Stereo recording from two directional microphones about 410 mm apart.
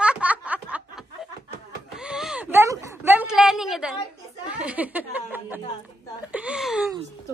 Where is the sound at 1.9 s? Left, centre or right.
Centre.